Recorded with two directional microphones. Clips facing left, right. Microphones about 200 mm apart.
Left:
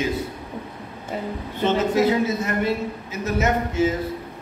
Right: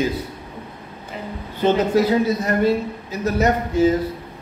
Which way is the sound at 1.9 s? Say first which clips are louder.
Right 2 dB; 35° right (ahead or behind).